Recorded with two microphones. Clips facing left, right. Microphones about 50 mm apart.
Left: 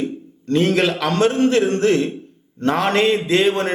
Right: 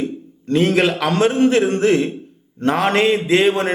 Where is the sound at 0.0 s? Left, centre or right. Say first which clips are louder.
Right 1 dB; centre.